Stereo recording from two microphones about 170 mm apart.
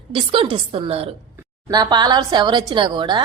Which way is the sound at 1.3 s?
20° right (ahead or behind).